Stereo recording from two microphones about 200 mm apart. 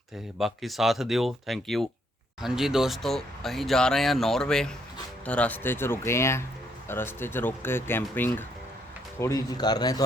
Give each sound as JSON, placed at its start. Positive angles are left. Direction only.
{"t": 0.3, "sound": "speech", "side_deg": 0}